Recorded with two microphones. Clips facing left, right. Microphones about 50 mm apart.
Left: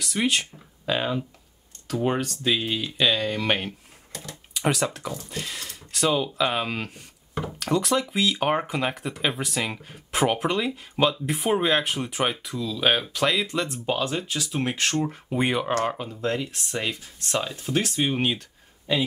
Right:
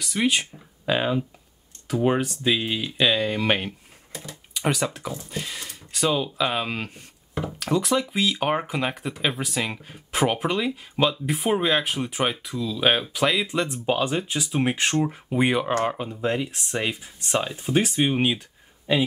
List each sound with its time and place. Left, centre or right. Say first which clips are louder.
0.0 s speech: right 1 dB; centre
15.0 s speech: right 2 dB; centre